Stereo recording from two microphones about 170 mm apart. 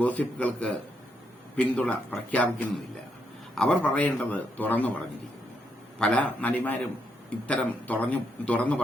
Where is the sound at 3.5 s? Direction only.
5° left (ahead or behind).